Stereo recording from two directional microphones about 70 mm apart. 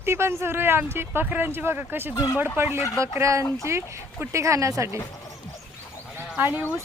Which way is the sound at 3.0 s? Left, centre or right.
Right.